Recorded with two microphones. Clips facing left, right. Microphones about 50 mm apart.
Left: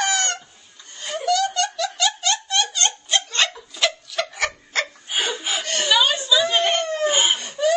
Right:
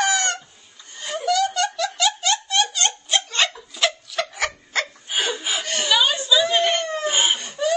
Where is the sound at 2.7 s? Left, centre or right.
Centre.